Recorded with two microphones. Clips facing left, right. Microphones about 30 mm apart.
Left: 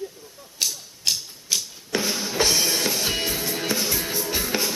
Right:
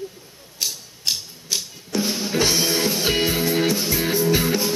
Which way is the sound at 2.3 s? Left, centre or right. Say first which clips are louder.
Right 2 dB; centre.